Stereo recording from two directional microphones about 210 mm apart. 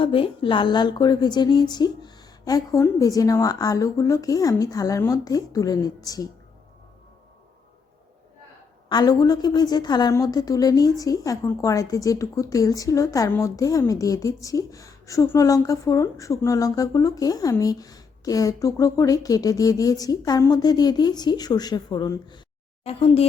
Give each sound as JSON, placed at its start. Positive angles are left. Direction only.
{"t": 0.0, "sound": "a woman's voice", "side_deg": 25}
{"t": 8.9, "sound": "a woman's voice", "side_deg": 20}